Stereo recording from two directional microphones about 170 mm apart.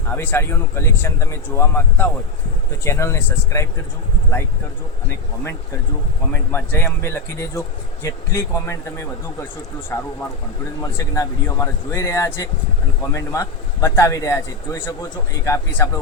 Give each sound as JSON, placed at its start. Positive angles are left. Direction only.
{"t": 0.1, "sound": "a man's voice", "side_deg": 15}
{"t": 6.5, "sound": "a man's voice", "side_deg": 15}